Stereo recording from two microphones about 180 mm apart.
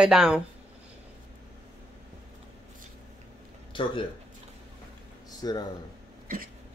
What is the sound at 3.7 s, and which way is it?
Speech, 30° left (ahead or behind).